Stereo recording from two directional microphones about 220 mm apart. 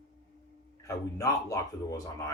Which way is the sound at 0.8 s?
15° left (ahead or behind).